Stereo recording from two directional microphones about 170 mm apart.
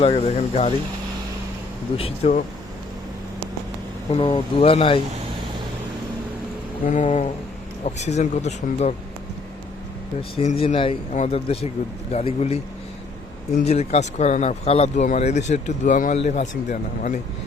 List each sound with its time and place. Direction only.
0.0 s speech: 35° left (ahead or behind)
2.0 s speech: 35° left (ahead or behind)
4.1 s speech: 35° left (ahead or behind)
6.8 s speech: 45° left (ahead or behind)
10.2 s speech: 35° left (ahead or behind)
13.7 s speech: 40° left (ahead or behind)